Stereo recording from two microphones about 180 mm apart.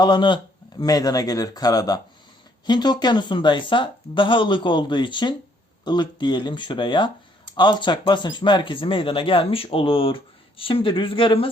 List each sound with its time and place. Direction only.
0.0 s speech: 25° left (ahead or behind)